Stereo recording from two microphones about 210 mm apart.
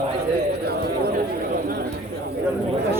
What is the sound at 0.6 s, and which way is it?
Speech, 50° right (ahead or behind).